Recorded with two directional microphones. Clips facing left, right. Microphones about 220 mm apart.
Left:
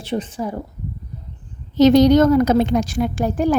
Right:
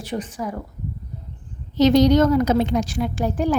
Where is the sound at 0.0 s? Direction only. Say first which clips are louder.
Left 3 dB; 25° left (ahead or behind).